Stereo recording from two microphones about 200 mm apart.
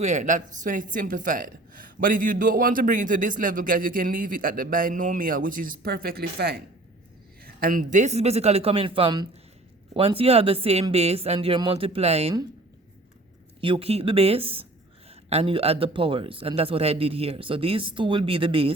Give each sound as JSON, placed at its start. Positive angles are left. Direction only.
{"t": 0.0, "sound": "a woman's voice", "side_deg": -35}
{"t": 13.6, "sound": "speech", "side_deg": -25}